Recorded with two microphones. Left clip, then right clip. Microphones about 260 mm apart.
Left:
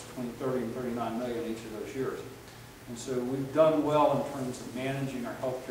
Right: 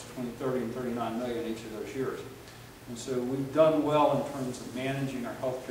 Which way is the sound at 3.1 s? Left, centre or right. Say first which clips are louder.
Right 1 dB; centre.